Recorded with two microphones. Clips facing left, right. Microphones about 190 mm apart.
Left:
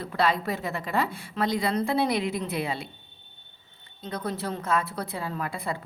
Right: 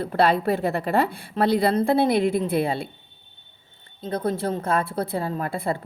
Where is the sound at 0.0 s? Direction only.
60° right (ahead or behind).